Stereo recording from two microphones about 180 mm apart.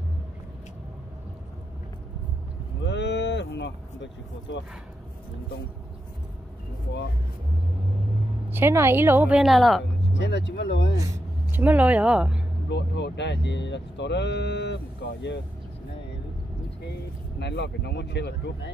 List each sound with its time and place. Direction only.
2.8 s cattle: 80° left
8.5 s a woman's voice: 15° right (ahead or behind)
10.1 s speech: 80° left
11.5 s a woman's voice: 10° right (ahead or behind)
12.6 s speech: 75° left (ahead or behind)
17.4 s speech: 70° left (ahead or behind)